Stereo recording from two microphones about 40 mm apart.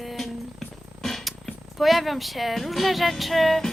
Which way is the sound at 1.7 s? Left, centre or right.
Centre.